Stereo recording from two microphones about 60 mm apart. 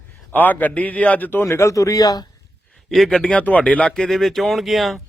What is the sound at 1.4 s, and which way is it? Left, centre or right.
Speech, left.